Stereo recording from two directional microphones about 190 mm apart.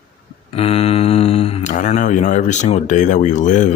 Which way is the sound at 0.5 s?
30° left (ahead or behind).